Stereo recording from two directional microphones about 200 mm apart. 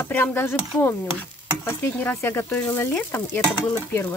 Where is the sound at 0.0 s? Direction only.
10° left (ahead or behind).